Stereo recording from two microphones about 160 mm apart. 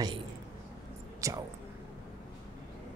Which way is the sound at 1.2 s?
20° right (ahead or behind).